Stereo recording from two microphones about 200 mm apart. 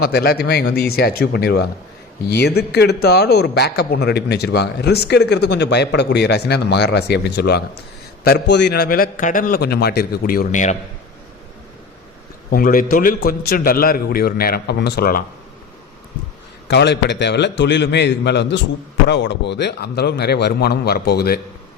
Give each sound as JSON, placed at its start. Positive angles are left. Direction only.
{"t": 0.0, "sound": "a man's voice", "side_deg": 50}
{"t": 12.5, "sound": "a man's voice", "side_deg": 45}
{"t": 16.6, "sound": "a man's voice", "side_deg": 60}